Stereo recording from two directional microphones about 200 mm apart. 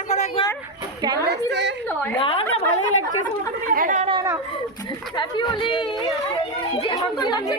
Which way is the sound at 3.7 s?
40° right (ahead or behind).